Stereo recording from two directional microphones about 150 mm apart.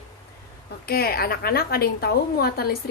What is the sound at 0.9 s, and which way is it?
A woman's voice, 90° left.